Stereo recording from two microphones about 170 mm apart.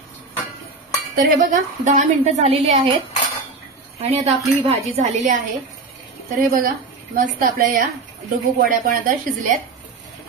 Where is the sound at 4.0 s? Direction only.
40° right (ahead or behind).